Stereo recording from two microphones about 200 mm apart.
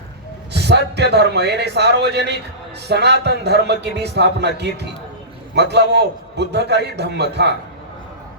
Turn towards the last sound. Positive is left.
turn(degrees=-55)  # may be behind; listen again after turning